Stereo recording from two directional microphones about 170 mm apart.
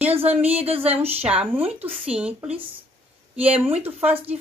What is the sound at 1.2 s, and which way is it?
Speech, 10° right (ahead or behind).